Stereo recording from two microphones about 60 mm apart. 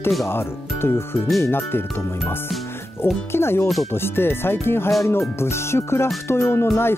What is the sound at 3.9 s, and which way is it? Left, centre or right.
Music, left.